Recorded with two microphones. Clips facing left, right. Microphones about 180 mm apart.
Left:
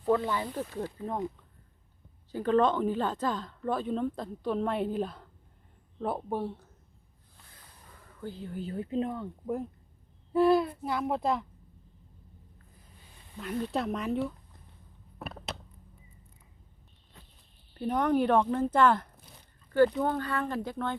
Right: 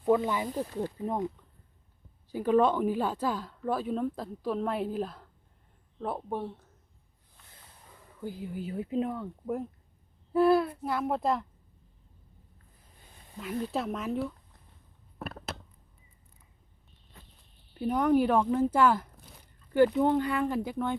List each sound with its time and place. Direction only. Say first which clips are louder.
0.0 s speech: right 2 dB; 15° right (ahead or behind)
2.3 s a woman's voice: right 1 dB; 10° right (ahead or behind)
8.2 s a woman's voice: right 1 dB; 10° right (ahead or behind)
13.4 s a woman's voice: left 1 dB; centre (ahead or behind)
17.7 s a woman's voice: right 2 dB; 5° right (ahead or behind)